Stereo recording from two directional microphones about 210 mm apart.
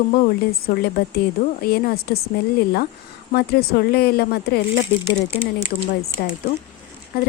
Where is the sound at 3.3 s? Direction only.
50° left (ahead or behind).